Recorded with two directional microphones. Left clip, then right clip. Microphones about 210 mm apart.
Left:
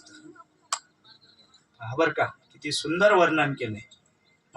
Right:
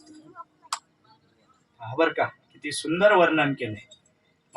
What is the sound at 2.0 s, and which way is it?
Speech, 40° left (ahead or behind).